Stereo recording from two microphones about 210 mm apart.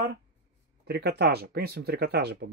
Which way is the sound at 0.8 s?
50° right (ahead or behind).